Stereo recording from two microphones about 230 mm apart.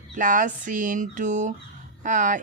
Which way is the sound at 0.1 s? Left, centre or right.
Right.